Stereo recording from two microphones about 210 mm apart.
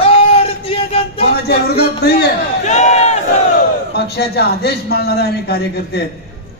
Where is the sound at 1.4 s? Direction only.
50° left (ahead or behind).